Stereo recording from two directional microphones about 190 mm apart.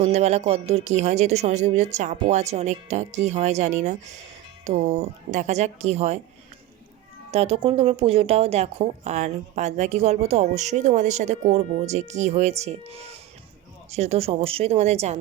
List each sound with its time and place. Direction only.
0.0 s a woman's voice: 35° right (ahead or behind)
7.3 s a woman's voice: 30° right (ahead or behind)